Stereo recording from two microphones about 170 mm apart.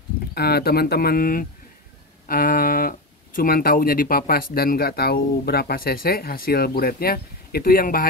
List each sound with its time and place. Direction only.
0.3 s speech: 70° left (ahead or behind)